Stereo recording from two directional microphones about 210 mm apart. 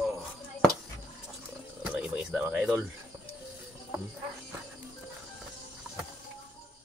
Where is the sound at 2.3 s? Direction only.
5° right (ahead or behind).